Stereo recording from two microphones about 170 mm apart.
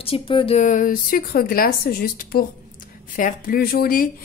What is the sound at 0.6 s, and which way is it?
Speech, 50° left (ahead or behind).